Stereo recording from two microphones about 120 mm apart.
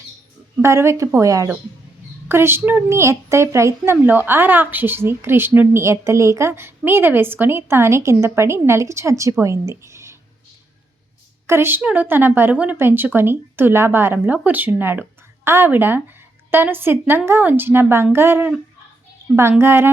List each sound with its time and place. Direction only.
0.6 s a woman's voice: 25° right (ahead or behind)
11.4 s a woman's voice: 20° right (ahead or behind)